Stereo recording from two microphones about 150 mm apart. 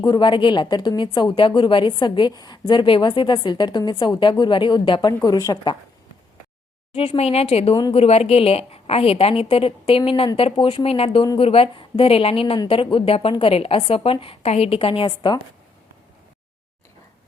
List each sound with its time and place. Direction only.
0.0 s a woman's voice: 30° left (ahead or behind)
6.9 s a woman's voice: 40° left (ahead or behind)